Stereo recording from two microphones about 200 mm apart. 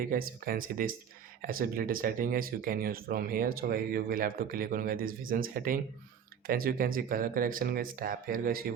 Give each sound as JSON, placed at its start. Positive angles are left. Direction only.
{"t": 0.1, "sound": "speech", "side_deg": -45}